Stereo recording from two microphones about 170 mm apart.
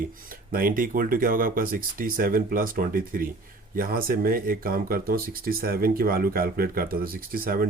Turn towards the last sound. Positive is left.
turn(degrees=-60)  # may be behind; listen again after turning